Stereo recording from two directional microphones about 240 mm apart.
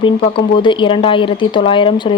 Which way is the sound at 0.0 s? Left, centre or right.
Left.